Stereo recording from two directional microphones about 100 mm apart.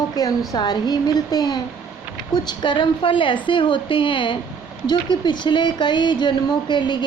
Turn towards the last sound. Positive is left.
turn(degrees=50)  # may be behind; listen again after turning